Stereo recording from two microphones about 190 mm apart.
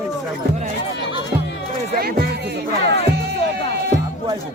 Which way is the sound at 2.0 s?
55° right (ahead or behind).